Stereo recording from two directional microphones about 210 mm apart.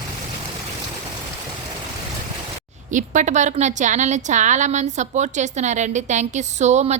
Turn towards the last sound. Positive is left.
turn(degrees=-35)  # may be behind; listen again after turning